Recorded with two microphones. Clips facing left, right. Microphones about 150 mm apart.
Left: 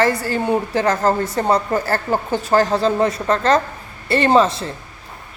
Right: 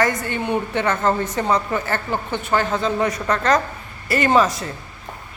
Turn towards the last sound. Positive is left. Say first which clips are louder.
# left 2 dB
turn(degrees=30)  # may be behind; listen again after turning